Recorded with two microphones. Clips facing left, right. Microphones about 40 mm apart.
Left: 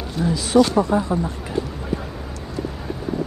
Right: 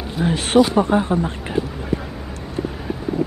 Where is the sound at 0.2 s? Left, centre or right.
Right.